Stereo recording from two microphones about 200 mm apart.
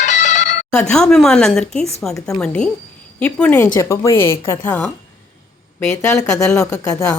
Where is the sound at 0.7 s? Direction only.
5° left (ahead or behind).